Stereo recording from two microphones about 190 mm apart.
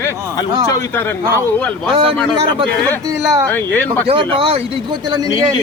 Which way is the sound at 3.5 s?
10° left (ahead or behind).